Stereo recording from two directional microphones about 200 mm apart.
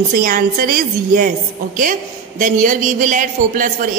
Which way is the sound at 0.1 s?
45° right (ahead or behind).